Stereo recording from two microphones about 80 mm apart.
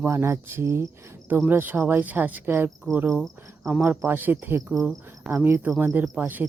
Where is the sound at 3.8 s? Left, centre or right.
Right.